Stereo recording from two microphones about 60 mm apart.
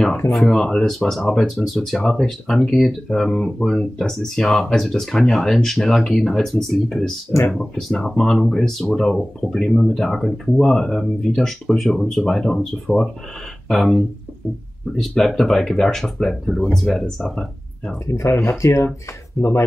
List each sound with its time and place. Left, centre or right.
0.3 s speech: centre
18.2 s speech: left